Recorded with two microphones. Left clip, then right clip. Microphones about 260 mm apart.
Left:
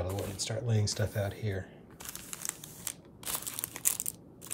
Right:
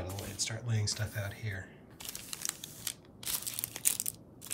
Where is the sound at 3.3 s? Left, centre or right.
Left.